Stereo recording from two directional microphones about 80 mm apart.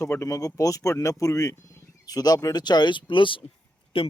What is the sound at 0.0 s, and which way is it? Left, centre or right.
Speech, left.